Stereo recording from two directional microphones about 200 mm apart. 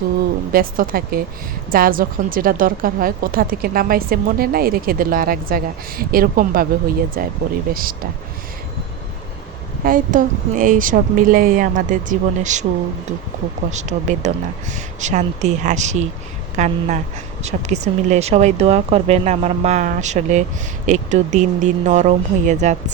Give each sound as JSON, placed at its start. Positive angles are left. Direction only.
{"t": 0.5, "sound": "a woman's voice", "side_deg": -45}
{"t": 9.8, "sound": "speech", "side_deg": -40}
{"t": 13.7, "sound": "speech", "side_deg": -35}